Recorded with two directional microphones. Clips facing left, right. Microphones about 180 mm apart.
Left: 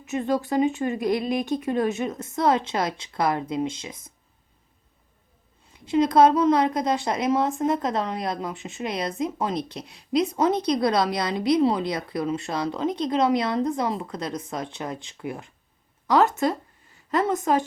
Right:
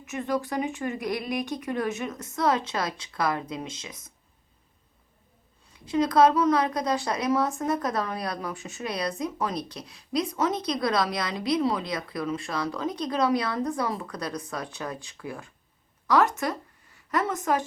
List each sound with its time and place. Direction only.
0.1 s a woman's voice: 25° left (ahead or behind)
5.8 s a woman's voice: 25° left (ahead or behind)